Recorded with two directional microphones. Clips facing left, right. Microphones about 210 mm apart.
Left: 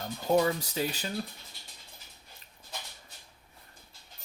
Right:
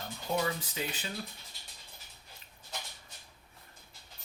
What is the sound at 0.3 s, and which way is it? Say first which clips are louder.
Speech: left 7 dB; 40° left (ahead or behind).